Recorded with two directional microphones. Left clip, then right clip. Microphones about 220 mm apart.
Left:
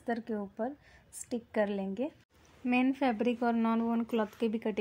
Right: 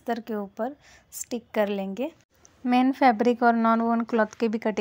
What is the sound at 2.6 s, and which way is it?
Speech, 30° right (ahead or behind).